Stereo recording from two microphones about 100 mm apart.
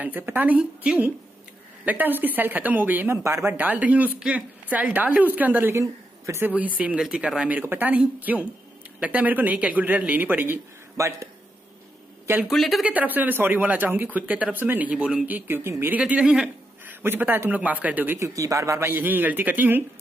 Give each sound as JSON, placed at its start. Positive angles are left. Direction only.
{"t": 0.0, "sound": "speech", "side_deg": -20}
{"t": 3.3, "sound": "a man's voice", "side_deg": -30}
{"t": 3.5, "sound": "speech", "side_deg": -15}
{"t": 6.5, "sound": "speech", "side_deg": -15}
{"t": 11.0, "sound": "speech", "side_deg": -30}
{"t": 12.4, "sound": "speech", "side_deg": 0}
{"t": 12.8, "sound": "speech", "side_deg": -15}
{"t": 16.0, "sound": "speech", "side_deg": -10}
{"t": 18.2, "sound": "a man's voice", "side_deg": -35}